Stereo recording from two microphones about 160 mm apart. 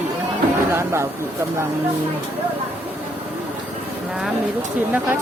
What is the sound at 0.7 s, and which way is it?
Speech, 15° right (ahead or behind).